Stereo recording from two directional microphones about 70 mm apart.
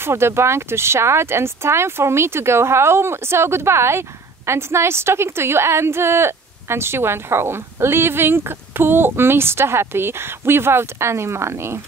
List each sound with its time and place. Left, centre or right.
0.0 s a woman's voice: right